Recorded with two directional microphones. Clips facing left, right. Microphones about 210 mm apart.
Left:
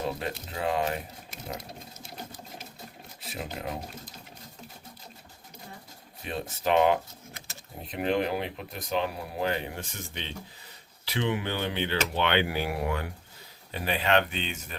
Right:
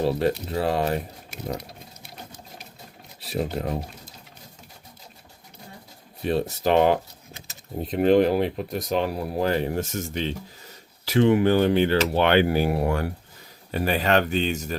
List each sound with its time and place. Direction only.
0.0 s speech: 35° right (ahead or behind)
3.2 s speech: 35° right (ahead or behind)
6.6 s speech: 40° right (ahead or behind)